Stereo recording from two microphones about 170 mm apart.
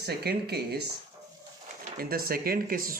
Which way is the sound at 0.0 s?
70° right (ahead or behind).